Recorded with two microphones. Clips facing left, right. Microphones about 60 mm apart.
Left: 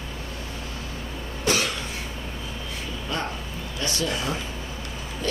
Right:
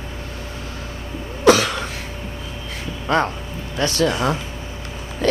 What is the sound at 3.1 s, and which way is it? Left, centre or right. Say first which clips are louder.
Speech: right 12 dB; right.